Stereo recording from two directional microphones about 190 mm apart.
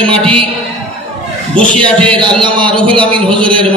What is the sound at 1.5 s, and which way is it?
A man's voice, 5° left (ahead or behind).